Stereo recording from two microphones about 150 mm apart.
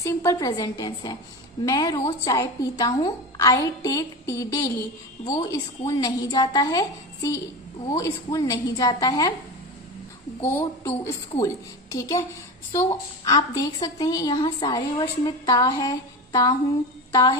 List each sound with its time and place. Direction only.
0.0 s speech: 20° left (ahead or behind)
10.4 s a woman's voice: 15° left (ahead or behind)